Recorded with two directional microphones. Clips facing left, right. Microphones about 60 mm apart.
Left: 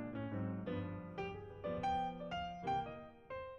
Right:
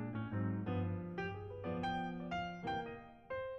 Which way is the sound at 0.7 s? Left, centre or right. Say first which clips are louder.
Right 2 dB; right.